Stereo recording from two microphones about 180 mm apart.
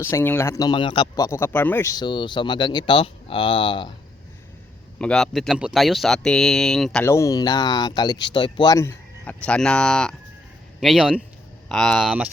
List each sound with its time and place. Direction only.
0.0 s a man's voice: 15° left (ahead or behind)
4.9 s speech: 5° left (ahead or behind)
7.0 s a man's voice: 15° left (ahead or behind)
9.5 s speech: 5° left (ahead or behind)